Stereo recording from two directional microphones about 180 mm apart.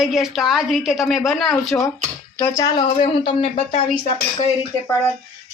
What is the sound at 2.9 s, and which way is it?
Speech, 30° left (ahead or behind).